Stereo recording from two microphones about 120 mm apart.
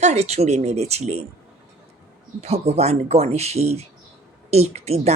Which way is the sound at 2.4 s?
60° right (ahead or behind).